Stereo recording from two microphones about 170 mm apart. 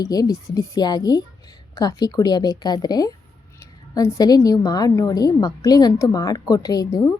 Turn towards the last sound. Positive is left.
turn(degrees=20)  # may be behind; listen again after turning